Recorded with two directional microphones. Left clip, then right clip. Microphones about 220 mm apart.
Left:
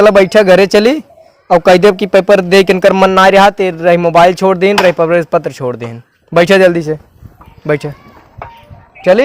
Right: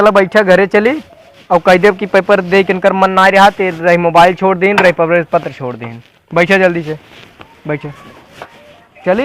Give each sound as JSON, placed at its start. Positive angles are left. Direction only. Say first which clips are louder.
{"t": 0.0, "sound": "speech", "louder": "left 3 dB", "side_deg": 50}